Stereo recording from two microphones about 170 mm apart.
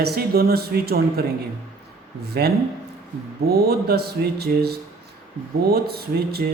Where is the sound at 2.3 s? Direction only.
70° right (ahead or behind).